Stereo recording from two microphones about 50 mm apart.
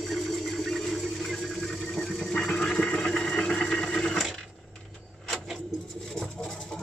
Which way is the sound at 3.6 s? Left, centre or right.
Centre.